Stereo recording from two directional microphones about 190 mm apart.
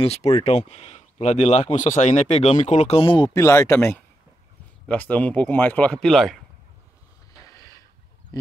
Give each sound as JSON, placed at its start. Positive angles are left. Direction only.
{"t": 0.0, "sound": "speech", "side_deg": 35}
{"t": 3.3, "sound": "speech", "side_deg": 15}
{"t": 7.5, "sound": "a sound", "side_deg": 20}